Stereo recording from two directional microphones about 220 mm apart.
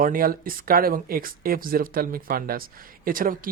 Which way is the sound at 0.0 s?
40° right (ahead or behind).